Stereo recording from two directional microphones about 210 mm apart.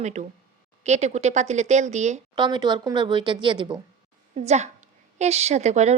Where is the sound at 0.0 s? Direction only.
35° right (ahead or behind).